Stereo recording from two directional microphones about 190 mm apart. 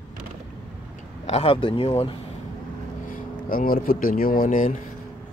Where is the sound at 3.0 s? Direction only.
45° left (ahead or behind).